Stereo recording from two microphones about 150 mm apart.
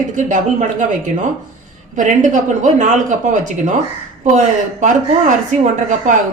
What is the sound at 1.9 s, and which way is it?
Speech, 55° right (ahead or behind).